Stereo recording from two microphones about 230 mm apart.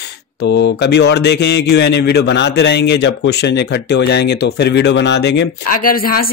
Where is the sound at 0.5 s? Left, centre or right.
Left.